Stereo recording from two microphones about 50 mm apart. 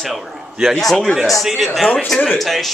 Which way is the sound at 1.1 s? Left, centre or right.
Centre.